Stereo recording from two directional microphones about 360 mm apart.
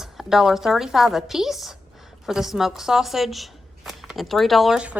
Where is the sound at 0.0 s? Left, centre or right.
Centre.